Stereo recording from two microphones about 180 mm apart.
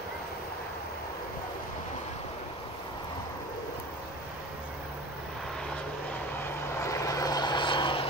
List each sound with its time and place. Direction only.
6.8 s vehicle: 15° left (ahead or behind)